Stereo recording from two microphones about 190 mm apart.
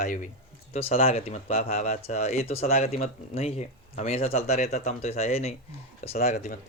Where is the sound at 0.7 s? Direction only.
30° left (ahead or behind).